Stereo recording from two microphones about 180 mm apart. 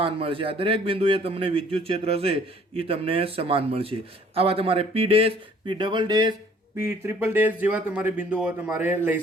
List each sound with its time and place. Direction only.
0.0 s a man's voice: 30° right (ahead or behind); by 9.2 s 10° right (ahead or behind)